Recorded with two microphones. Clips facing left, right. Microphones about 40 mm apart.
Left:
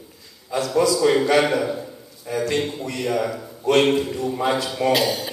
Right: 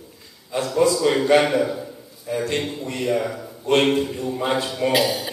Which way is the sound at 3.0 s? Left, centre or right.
Centre.